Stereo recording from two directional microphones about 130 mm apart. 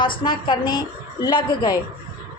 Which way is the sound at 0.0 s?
40° left (ahead or behind).